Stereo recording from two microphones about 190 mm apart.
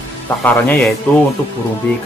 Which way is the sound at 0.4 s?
10° left (ahead or behind).